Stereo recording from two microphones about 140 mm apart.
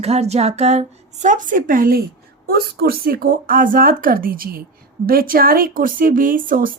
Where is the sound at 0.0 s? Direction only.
50° right (ahead or behind).